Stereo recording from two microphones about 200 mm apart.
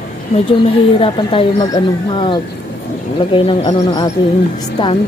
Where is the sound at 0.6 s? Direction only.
25° left (ahead or behind).